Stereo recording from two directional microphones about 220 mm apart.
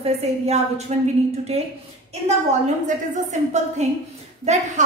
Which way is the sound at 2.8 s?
35° right (ahead or behind).